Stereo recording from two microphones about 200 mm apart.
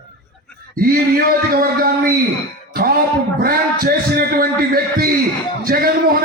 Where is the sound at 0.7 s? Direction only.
45° right (ahead or behind).